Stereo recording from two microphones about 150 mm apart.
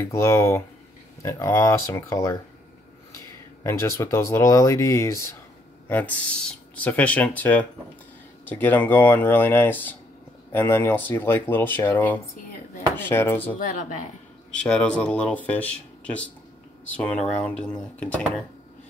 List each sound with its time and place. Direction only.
0.0 s speech: 20° left (ahead or behind)
13.6 s a woman's voice: 60° left (ahead or behind)
14.5 s speech: 5° left (ahead or behind)